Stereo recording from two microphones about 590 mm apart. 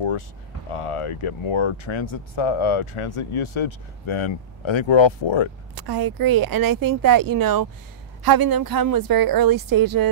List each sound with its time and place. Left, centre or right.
0.7 s speech: left
5.8 s speech: right